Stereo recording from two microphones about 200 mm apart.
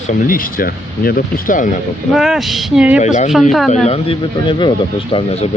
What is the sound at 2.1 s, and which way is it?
Speech, centre (ahead or behind).